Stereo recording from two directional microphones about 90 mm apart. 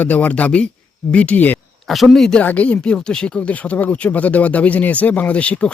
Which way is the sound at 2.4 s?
15° left (ahead or behind).